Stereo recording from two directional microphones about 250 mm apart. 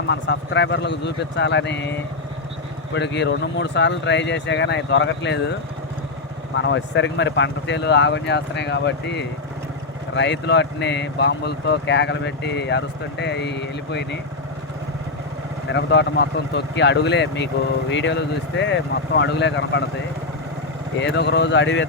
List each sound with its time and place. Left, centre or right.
0.1 s speech: left
2.9 s speech: left
6.6 s speech: left
15.7 s speech: left
21.0 s speech: left